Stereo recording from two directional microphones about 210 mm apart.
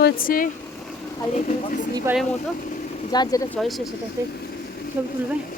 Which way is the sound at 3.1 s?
20° left (ahead or behind).